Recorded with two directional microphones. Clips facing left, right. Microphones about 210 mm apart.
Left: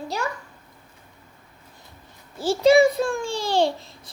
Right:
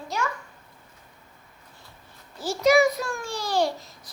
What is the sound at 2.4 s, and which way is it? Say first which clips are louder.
A child's voice: left 4 dB; 30° left (ahead or behind).